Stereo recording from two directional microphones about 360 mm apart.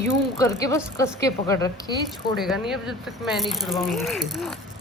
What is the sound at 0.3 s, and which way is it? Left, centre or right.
A woman's voice, centre.